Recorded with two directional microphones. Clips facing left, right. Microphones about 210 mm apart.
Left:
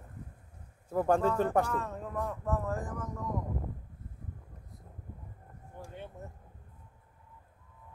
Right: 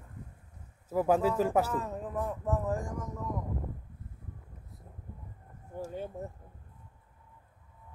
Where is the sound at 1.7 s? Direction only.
15° right (ahead or behind).